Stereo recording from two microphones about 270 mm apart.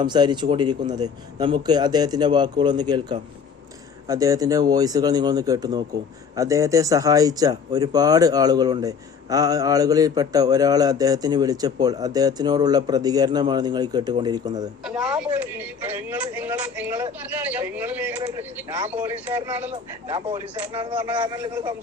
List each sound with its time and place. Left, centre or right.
0.0 s speech: centre
4.0 s speech: centre
14.8 s speech: centre
19.7 s speech: centre